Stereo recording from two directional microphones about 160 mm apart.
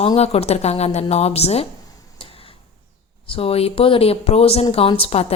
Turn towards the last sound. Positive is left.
turn(degrees=40)  # may be behind; listen again after turning